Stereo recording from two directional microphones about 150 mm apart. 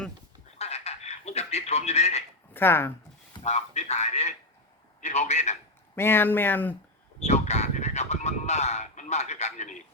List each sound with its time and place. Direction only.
0.6 s frog: 45° left (ahead or behind)
2.5 s speech: 15° left (ahead or behind)
3.4 s a man's voice: 45° left (ahead or behind)
6.0 s speech: 15° left (ahead or behind)
7.2 s speech: 50° left (ahead or behind)